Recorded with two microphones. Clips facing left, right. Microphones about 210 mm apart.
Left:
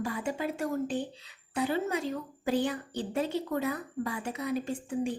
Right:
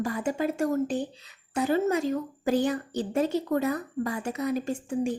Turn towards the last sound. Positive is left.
turn(degrees=-45)  # may be behind; listen again after turning